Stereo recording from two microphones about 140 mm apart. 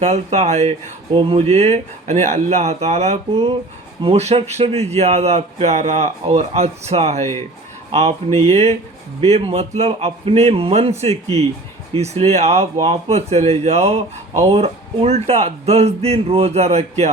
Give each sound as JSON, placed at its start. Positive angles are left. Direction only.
{"t": 0.0, "sound": "a man's voice", "side_deg": -50}
{"t": 1.1, "sound": "a man's voice", "side_deg": -40}